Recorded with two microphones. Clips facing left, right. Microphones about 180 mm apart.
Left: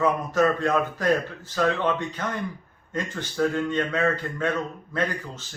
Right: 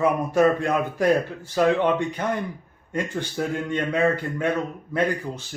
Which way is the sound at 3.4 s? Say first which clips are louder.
Left 3 dB; 15° right (ahead or behind).